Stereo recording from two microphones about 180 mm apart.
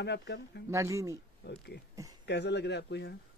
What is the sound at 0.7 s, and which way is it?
Speech, 15° right (ahead or behind).